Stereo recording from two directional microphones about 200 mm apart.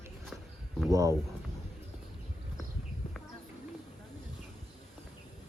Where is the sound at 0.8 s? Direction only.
15° right (ahead or behind).